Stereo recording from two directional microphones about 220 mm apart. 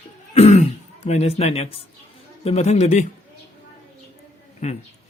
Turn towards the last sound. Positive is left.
turn(degrees=30)  # may be behind; listen again after turning